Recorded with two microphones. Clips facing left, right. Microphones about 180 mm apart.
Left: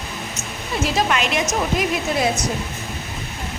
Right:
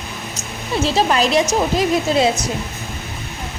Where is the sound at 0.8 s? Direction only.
30° right (ahead or behind).